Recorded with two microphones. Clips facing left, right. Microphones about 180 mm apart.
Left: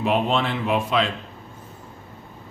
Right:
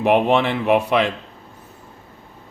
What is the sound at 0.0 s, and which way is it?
A man's voice, 65° right (ahead or behind).